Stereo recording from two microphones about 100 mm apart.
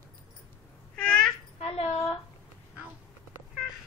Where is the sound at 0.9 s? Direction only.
10° left (ahead or behind).